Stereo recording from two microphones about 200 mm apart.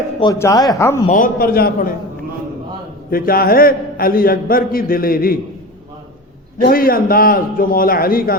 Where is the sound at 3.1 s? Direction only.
45° left (ahead or behind).